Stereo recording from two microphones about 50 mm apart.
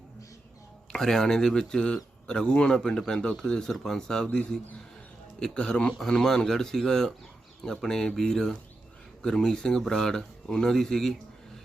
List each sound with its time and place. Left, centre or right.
0.9 s speech: centre
6.0 s speech: centre